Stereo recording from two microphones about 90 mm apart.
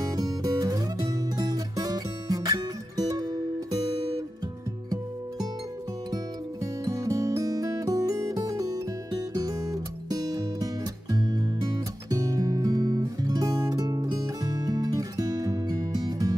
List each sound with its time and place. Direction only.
0.0 s music: 45° right (ahead or behind)
4.8 s music: 45° right (ahead or behind)